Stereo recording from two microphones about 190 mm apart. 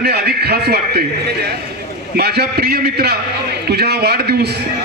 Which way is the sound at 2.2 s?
55° right (ahead or behind).